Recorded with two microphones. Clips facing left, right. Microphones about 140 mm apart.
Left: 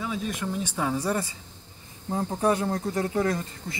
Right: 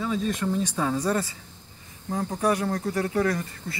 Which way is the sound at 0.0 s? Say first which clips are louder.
Right 4 dB; 5° left (ahead or behind).